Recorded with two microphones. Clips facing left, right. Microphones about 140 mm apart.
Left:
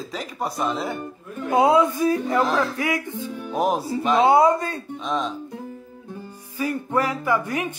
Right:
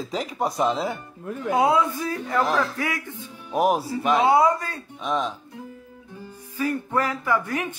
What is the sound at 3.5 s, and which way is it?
Speech, 5° right (ahead or behind).